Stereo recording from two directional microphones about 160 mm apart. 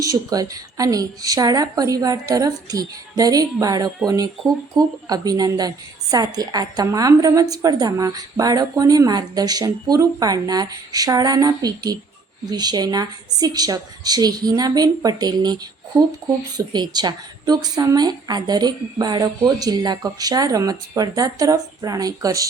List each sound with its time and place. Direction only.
0.0 s a woman's voice: 20° right (ahead or behind)